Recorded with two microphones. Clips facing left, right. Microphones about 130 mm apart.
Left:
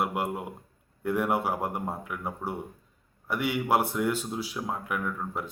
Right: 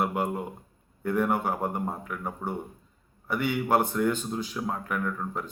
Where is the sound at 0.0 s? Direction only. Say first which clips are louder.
Right 2 dB; 5° left (ahead or behind).